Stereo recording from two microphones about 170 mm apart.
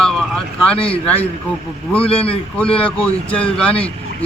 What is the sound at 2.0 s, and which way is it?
Speech, 35° left (ahead or behind).